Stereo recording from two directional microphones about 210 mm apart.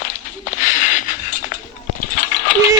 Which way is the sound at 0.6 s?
35° left (ahead or behind).